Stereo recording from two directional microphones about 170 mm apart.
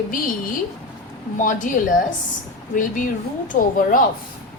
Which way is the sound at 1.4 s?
50° left (ahead or behind).